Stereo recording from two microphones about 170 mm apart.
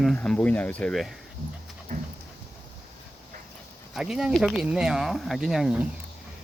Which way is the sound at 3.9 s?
Centre (ahead or behind).